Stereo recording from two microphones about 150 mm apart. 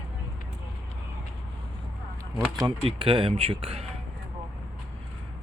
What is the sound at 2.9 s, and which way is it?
Speech, 35° right (ahead or behind).